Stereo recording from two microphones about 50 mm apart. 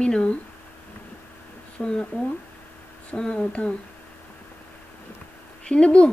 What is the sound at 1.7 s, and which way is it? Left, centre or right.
Speech, centre.